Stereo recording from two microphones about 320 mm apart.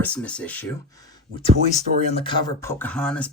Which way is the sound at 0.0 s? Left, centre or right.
Centre.